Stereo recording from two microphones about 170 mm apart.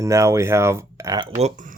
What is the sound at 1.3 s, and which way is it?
Speech, 45° right (ahead or behind).